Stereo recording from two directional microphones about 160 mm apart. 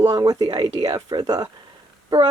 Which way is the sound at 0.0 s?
20° right (ahead or behind).